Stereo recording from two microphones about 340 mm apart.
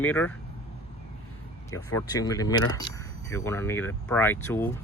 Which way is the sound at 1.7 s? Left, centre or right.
Centre.